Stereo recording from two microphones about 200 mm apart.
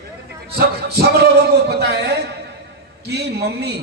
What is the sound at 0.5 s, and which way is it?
A man's voice, 50° right (ahead or behind).